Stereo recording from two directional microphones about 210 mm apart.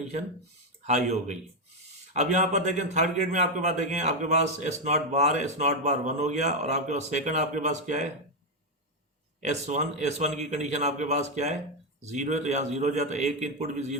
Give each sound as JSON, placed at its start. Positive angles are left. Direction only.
{"t": 0.9, "sound": "a man's voice", "side_deg": -35}
{"t": 9.4, "sound": "a man's voice", "side_deg": -35}